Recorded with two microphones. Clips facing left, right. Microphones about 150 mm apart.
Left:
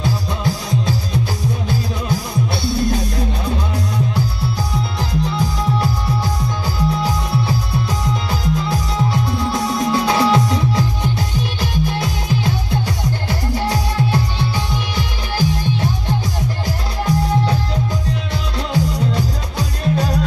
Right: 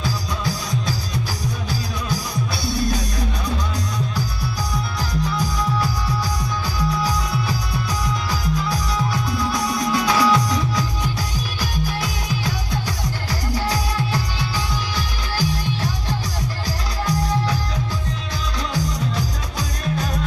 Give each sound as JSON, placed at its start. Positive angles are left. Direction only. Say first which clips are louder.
{"t": 0.0, "sound": "music", "louder": "left 4 dB", "side_deg": 25}
{"t": 5.2, "sound": "music", "louder": "left 2 dB", "side_deg": 25}
{"t": 18.7, "sound": "music", "louder": "left 7 dB", "side_deg": 30}